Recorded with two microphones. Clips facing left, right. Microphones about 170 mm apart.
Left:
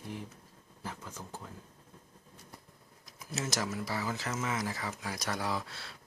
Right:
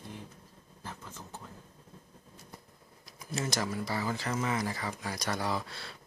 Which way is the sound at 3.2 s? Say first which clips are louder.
Right 2 dB; 5° left (ahead or behind).